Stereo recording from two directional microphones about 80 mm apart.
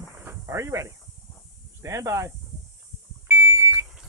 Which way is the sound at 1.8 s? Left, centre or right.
Right.